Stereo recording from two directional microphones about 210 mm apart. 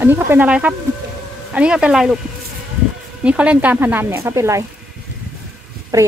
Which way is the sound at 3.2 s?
5° right (ahead or behind).